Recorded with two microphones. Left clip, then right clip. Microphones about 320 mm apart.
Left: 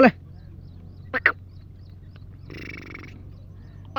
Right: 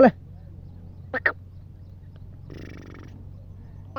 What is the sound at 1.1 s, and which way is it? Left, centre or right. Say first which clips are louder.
Quack: left 3 dB; centre.